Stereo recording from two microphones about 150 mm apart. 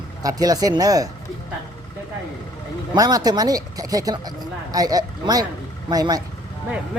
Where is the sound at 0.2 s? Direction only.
25° right (ahead or behind).